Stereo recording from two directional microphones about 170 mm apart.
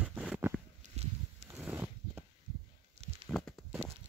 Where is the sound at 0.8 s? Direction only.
45° right (ahead or behind).